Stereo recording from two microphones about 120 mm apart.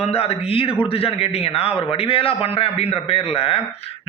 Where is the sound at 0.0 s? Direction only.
60° left (ahead or behind).